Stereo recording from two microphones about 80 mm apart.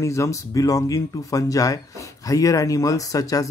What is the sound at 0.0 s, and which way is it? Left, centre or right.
Speech, left.